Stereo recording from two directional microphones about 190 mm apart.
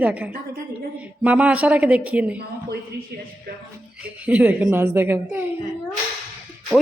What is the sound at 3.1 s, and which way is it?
Speech, 60° right (ahead or behind).